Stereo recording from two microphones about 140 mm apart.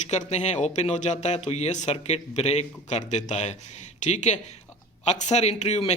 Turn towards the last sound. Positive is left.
turn(degrees=50)  # may be behind; listen again after turning